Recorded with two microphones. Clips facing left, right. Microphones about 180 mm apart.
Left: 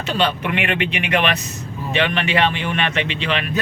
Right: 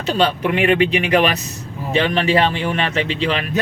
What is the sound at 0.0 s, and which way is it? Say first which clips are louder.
Speech: right 3 dB; 35° right (ahead or behind).